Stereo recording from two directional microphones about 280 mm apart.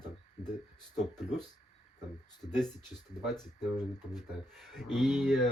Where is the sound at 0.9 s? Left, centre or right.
Centre.